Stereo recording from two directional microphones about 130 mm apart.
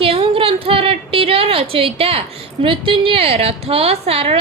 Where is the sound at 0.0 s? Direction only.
45° right (ahead or behind).